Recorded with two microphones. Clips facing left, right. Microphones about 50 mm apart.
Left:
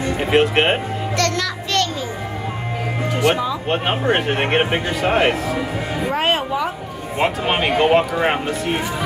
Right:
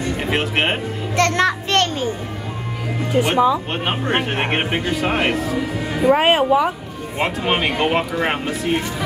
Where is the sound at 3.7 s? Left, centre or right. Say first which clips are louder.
Left 3 dB; centre.